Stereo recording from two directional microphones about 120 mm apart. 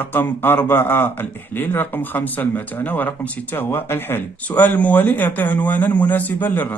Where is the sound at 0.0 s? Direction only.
15° left (ahead or behind).